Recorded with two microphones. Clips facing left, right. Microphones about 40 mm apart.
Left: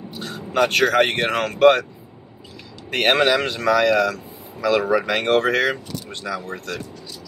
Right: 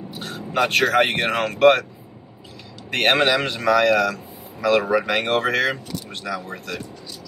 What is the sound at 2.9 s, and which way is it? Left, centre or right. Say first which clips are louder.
Speech: left 1 dB; centre.